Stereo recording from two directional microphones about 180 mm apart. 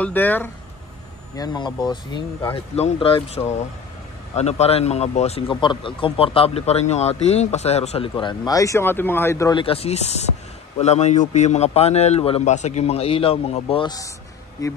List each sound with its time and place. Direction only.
0.0 s speech: 10° left (ahead or behind)
1.3 s speech: 20° left (ahead or behind)
9.6 s speech: 30° left (ahead or behind)